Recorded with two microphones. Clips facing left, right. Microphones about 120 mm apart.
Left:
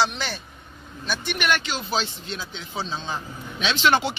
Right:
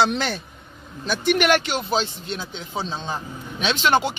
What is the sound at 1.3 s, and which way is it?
Speech, 90° right.